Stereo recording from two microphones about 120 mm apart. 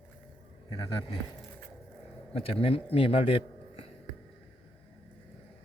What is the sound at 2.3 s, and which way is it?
A man's voice, 50° left (ahead or behind).